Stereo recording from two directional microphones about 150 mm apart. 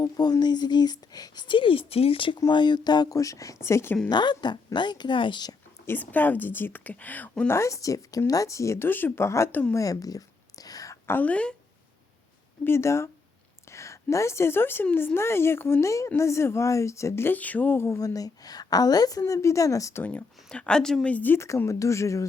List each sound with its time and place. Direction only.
0.0 s a woman's voice: 25° left (ahead or behind)
4.1 s a woman's voice: 30° left (ahead or behind)
5.8 s a woman's voice: 15° left (ahead or behind)
12.6 s a woman's voice: 20° left (ahead or behind)